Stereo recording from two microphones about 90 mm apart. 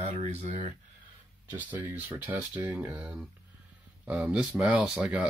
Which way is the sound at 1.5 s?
20° right (ahead or behind).